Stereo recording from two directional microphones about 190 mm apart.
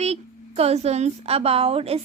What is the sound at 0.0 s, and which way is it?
A woman's voice, 35° right (ahead or behind).